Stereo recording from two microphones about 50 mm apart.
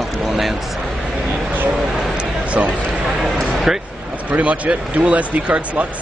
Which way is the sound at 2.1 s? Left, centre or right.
Right.